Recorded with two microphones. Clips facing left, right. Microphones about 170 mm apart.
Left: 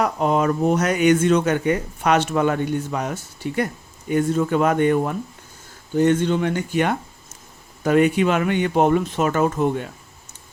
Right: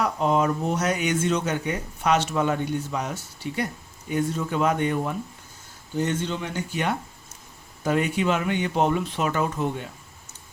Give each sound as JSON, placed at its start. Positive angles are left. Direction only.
{"t": 0.0, "sound": "speech", "side_deg": 55}